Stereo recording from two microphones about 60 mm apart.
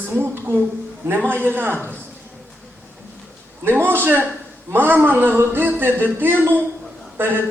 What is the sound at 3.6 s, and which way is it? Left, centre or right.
Speech, right.